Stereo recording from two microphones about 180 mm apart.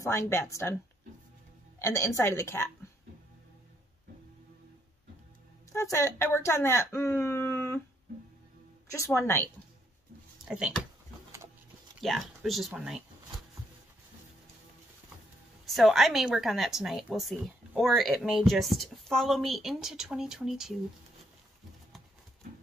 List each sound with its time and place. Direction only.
0.0 s a woman's voice: 15° left (ahead or behind)
1.8 s a woman's voice: 15° left (ahead or behind)
5.7 s speech: 15° left (ahead or behind)
8.9 s a woman's voice: 15° left (ahead or behind)
10.5 s a woman's voice: 5° right (ahead or behind)
12.0 s a woman's voice: centre (ahead or behind)
15.6 s a woman's voice: centre (ahead or behind)